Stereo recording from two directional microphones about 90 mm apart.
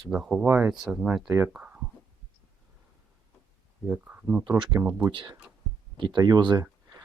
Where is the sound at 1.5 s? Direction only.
10° right (ahead or behind).